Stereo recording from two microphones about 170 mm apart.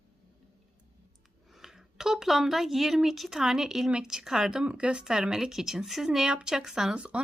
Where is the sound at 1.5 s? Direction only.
Centre (ahead or behind).